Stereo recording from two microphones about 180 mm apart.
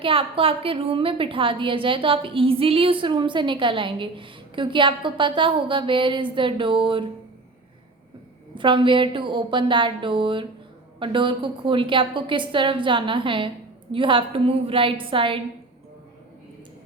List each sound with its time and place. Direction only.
0.0 s a woman's voice: 30° right (ahead or behind)
8.5 s a woman's voice: 25° right (ahead or behind)